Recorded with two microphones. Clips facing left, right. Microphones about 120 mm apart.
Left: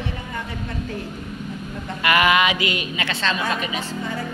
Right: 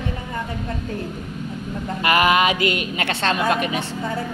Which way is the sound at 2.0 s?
40° right (ahead or behind).